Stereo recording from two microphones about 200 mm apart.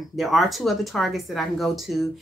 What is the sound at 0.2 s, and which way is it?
A woman's voice, centre (ahead or behind).